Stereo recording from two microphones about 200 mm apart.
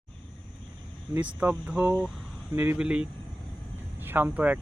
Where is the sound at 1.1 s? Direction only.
10° right (ahead or behind).